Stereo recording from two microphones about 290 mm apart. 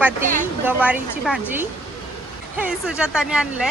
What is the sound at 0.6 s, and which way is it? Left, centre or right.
A woman's voice, centre.